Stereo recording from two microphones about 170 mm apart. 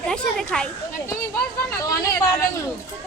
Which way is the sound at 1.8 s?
20° left (ahead or behind).